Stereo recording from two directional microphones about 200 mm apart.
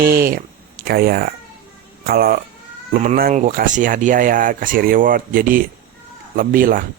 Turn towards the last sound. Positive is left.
turn(degrees=-45)  # may be behind; listen again after turning